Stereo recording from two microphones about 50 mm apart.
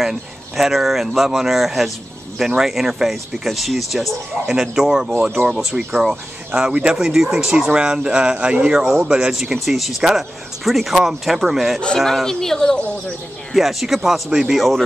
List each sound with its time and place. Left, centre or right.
0.0 s speech: centre
6.5 s speech: right
8.7 s speech: centre
9.0 s speech: centre
12.0 s speech: centre
13.5 s speech: centre